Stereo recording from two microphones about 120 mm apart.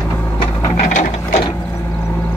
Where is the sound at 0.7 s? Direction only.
90° left.